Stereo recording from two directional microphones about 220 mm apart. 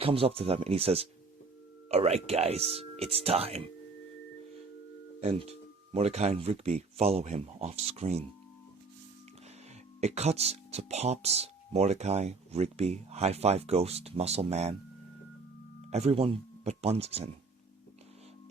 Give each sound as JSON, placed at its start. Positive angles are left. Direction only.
{"t": 0.0, "sound": "speech", "side_deg": -25}
{"t": 5.2, "sound": "speech", "side_deg": -30}
{"t": 10.0, "sound": "speech", "side_deg": -30}
{"t": 15.9, "sound": "speech", "side_deg": -30}